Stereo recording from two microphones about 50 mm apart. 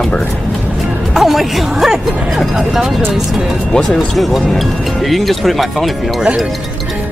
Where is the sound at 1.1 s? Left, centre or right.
Centre.